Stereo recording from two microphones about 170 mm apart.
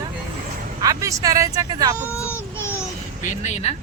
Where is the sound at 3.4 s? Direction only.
40° left (ahead or behind).